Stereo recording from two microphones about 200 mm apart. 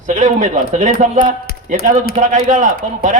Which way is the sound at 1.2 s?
50° left (ahead or behind).